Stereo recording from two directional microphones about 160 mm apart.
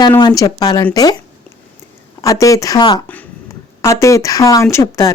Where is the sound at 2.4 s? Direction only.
20° left (ahead or behind).